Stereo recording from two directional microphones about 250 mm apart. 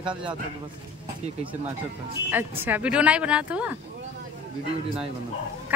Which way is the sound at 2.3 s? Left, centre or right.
Centre.